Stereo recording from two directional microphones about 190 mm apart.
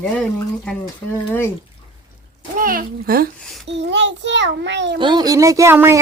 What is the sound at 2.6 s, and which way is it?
Speech, 50° right (ahead or behind).